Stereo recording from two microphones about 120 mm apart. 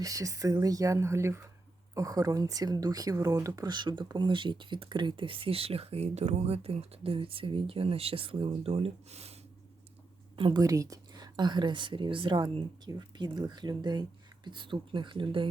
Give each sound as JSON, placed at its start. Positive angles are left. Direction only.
{"t": 0.0, "sound": "speech", "side_deg": -30}
{"t": 10.3, "sound": "a woman's voice", "side_deg": -45}
{"t": 10.6, "sound": "speech", "side_deg": -30}